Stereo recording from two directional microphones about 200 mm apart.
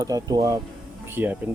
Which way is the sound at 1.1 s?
10° right (ahead or behind).